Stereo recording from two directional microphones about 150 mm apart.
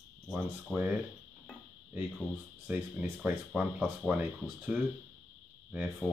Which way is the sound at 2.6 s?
10° right (ahead or behind).